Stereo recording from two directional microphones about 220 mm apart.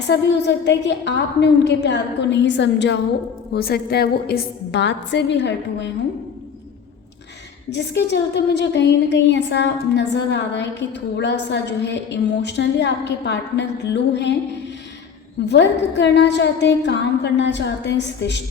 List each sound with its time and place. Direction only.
0.1 s a woman's voice: 50° left (ahead or behind)
7.7 s a woman's voice: 50° left (ahead or behind)
15.4 s a woman's voice: 50° left (ahead or behind)